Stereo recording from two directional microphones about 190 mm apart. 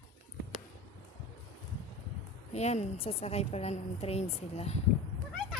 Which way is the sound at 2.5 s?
35° left (ahead or behind).